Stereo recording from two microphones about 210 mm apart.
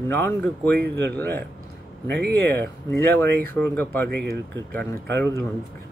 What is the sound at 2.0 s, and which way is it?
Speech, 55° right (ahead or behind).